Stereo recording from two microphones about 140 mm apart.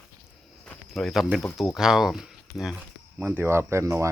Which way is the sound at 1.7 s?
5° right (ahead or behind).